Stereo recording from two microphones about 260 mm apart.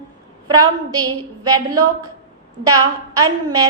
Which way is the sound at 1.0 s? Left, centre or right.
Centre.